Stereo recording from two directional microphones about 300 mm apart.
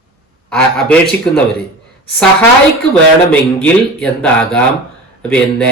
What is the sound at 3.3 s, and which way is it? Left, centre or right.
Speech, centre.